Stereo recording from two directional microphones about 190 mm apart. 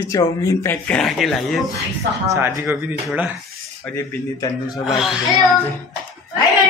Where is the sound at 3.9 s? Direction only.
20° left (ahead or behind).